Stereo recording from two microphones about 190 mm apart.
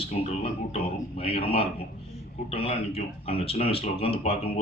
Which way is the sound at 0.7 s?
30° left (ahead or behind).